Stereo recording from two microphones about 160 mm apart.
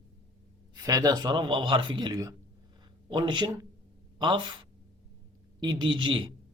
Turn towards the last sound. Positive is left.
turn(degrees=-30)  # may be behind; listen again after turning